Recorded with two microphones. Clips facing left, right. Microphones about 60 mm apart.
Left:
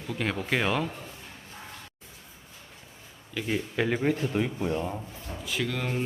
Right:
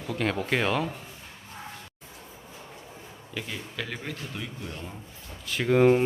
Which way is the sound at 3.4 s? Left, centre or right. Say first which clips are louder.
Left 12 dB; left.